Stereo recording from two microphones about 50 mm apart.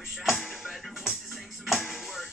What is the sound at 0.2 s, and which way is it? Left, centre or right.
Music, centre.